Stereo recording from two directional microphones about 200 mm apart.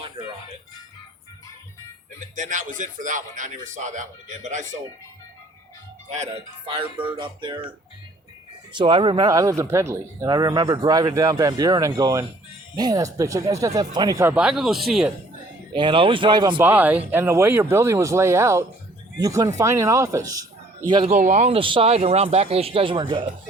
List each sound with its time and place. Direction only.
2.3 s speech: 40° right (ahead or behind)
6.1 s speech: 35° right (ahead or behind)
8.7 s speech: 25° right (ahead or behind); by 15.1 s centre (ahead or behind)
15.7 s speech: 25° right (ahead or behind)
16.6 s speech: 10° right (ahead or behind); by 21.2 s 25° right (ahead or behind)
21.2 s speech: 35° right (ahead or behind)